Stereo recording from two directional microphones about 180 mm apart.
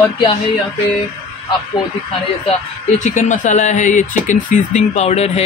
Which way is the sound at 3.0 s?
40° left (ahead or behind).